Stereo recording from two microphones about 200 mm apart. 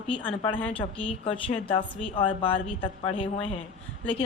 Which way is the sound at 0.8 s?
30° left (ahead or behind).